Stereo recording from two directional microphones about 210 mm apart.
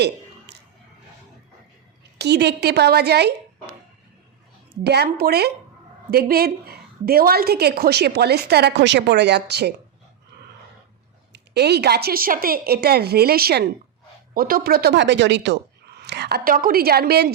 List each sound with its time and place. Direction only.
0.5 s a sound: 55° right (ahead or behind)
2.1 s a woman's voice: 55° right (ahead or behind)
4.8 s a woman's voice: 50° right (ahead or behind)
11.3 s a woman's voice: 50° right (ahead or behind)